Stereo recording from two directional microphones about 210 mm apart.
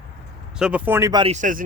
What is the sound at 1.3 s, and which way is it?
Speech, 40° right (ahead or behind).